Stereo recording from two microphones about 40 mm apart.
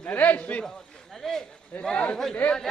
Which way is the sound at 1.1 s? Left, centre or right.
Centre.